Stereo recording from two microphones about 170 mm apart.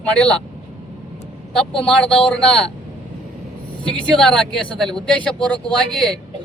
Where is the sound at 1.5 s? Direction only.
5° left (ahead or behind).